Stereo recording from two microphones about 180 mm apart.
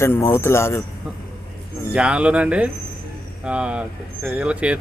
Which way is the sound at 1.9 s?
5° right (ahead or behind).